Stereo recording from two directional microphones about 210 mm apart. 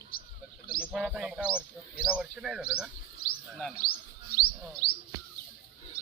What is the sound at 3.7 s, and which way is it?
Chirp, 45° left (ahead or behind).